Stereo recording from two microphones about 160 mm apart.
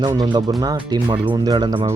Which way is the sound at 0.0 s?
25° right (ahead or behind).